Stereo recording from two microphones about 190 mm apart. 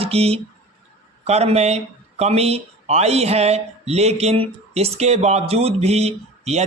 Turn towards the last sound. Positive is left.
turn(degrees=-35)  # may be behind; listen again after turning